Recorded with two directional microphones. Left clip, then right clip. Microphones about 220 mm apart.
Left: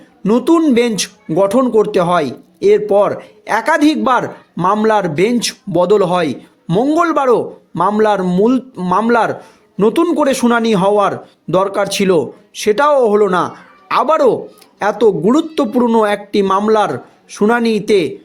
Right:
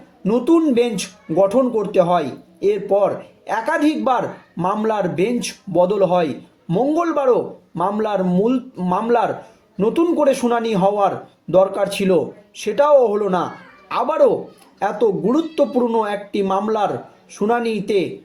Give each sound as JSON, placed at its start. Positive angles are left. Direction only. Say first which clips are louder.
{"t": 0.3, "sound": "a man's voice", "louder": "left 4 dB", "side_deg": 45}